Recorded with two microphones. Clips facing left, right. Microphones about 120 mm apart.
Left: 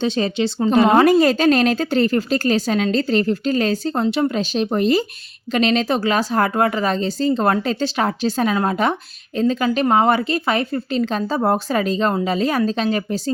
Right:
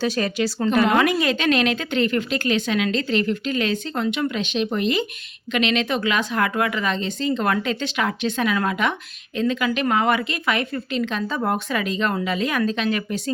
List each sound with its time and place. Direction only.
0.0 s a woman's voice: 25° left (ahead or behind)